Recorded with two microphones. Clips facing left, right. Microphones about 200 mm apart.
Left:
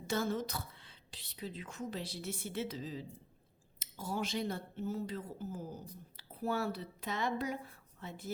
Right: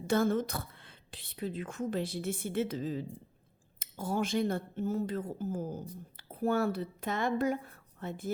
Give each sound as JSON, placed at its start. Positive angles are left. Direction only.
{"t": 0.1, "sound": "a woman's voice", "side_deg": -55}